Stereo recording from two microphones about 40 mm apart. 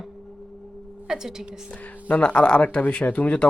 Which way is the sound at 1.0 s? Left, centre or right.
Centre.